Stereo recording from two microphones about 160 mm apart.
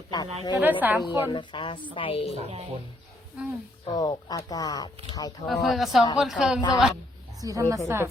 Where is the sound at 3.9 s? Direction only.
25° left (ahead or behind).